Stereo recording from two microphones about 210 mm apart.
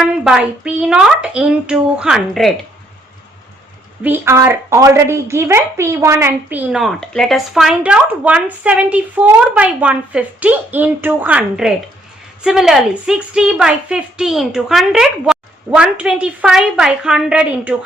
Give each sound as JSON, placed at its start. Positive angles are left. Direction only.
{"t": 0.0, "sound": "a woman's voice", "side_deg": -5}
{"t": 4.0, "sound": "a woman's voice", "side_deg": -10}